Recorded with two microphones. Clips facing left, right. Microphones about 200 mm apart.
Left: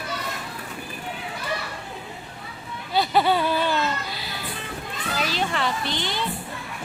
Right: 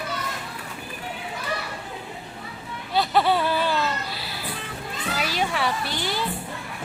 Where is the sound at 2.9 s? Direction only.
Centre (ahead or behind).